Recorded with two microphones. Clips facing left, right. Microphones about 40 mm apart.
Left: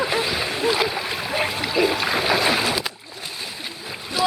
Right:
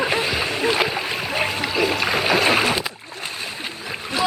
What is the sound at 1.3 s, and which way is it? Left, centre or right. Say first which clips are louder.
Boat: even; centre.